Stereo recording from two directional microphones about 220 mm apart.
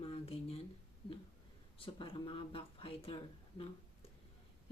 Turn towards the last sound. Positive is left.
turn(degrees=25)  # may be behind; listen again after turning